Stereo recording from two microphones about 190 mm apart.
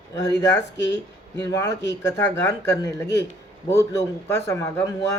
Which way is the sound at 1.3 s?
15° left (ahead or behind).